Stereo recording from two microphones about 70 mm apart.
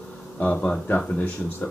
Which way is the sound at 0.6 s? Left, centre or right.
Centre.